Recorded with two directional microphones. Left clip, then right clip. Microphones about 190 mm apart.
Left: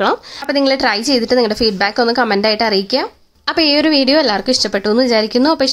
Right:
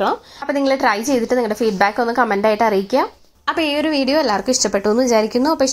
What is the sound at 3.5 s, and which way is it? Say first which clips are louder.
A woman's voice: left 5 dB; 35° left (ahead or behind).